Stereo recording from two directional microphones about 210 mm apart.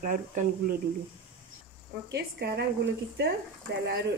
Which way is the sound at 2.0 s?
50° right (ahead or behind).